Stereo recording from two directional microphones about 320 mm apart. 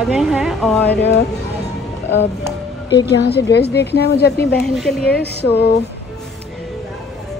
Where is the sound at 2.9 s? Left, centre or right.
Left.